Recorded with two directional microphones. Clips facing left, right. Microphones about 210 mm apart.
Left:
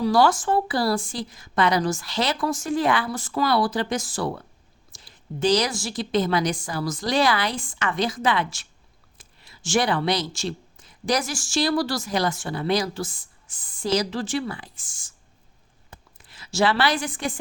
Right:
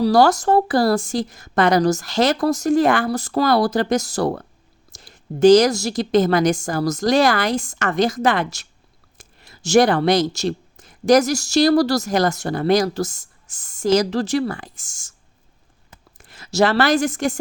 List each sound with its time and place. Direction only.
0.0 s a woman's voice: 40° right (ahead or behind)
4.9 s a sound: 45° right (ahead or behind)
5.4 s a woman's voice: 45° right (ahead or behind)
16.1 s a woman's voice: 45° right (ahead or behind)